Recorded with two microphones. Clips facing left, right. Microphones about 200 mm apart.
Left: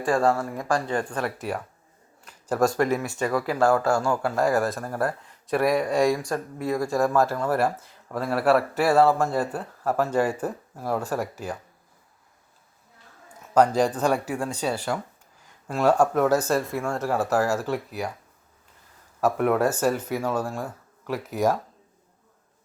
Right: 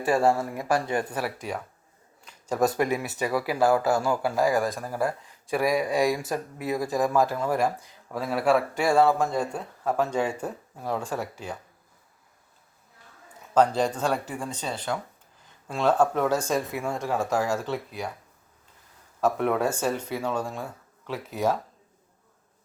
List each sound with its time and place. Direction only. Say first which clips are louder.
0.0 s speech: even; 25° right (ahead or behind)
0.5 s speech: even; 10° right (ahead or behind); by 11.5 s 10° left (ahead or behind)
13.5 s a man's voice: left 2 dB; 10° left (ahead or behind)
19.2 s speech: left 2 dB; 5° left (ahead or behind)